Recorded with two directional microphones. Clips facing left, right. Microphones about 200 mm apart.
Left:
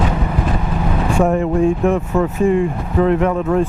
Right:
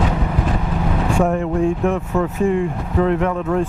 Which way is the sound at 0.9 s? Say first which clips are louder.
Left 2 dB; 15° left (ahead or behind).